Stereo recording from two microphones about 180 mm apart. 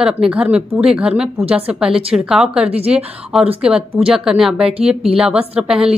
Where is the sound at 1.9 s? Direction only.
30° right (ahead or behind).